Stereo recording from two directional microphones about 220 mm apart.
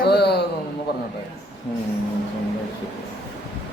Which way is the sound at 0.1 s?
50° left (ahead or behind).